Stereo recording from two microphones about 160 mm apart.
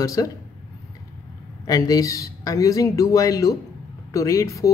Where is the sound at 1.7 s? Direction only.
20° left (ahead or behind).